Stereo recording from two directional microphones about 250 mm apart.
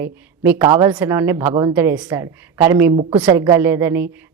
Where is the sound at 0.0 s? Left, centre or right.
Centre.